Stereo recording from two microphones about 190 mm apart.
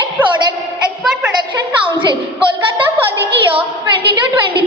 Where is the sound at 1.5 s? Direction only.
25° right (ahead or behind).